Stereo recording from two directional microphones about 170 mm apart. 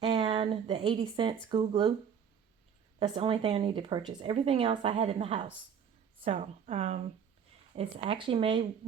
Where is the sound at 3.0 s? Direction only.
30° right (ahead or behind).